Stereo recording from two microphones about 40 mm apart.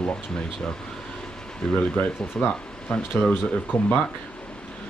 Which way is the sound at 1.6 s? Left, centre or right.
Centre.